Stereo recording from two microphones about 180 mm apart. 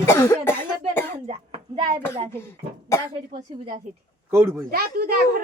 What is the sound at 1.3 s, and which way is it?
Speech, 30° right (ahead or behind).